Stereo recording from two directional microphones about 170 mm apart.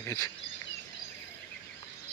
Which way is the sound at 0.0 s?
20° left (ahead or behind).